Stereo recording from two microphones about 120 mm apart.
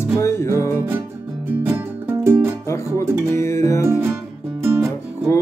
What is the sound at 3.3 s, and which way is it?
Music, 25° left (ahead or behind).